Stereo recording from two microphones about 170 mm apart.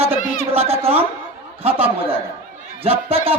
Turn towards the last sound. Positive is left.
turn(degrees=-35)  # may be behind; listen again after turning